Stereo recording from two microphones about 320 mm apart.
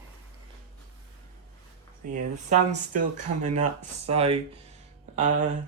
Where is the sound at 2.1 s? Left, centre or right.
Right.